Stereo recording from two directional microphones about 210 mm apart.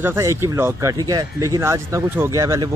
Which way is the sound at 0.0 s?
10° right (ahead or behind).